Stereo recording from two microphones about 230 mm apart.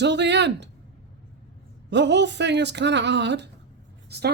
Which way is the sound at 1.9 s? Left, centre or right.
Right.